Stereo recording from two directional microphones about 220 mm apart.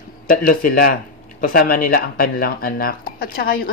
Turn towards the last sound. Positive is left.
turn(degrees=40)  # may be behind; listen again after turning